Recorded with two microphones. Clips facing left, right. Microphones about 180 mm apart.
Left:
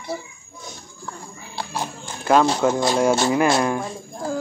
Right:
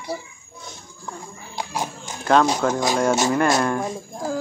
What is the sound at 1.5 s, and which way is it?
Horse, 15° right (ahead or behind).